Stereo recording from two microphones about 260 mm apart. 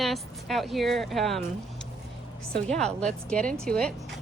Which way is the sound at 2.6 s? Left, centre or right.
Centre.